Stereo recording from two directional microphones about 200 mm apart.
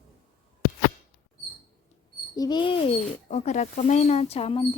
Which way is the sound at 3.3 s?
35° left (ahead or behind).